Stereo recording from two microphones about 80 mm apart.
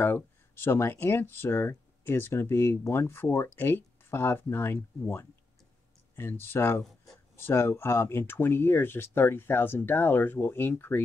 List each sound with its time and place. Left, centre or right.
0.0 s speech: left